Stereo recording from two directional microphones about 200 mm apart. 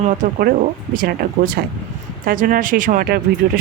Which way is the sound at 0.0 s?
40° right (ahead or behind).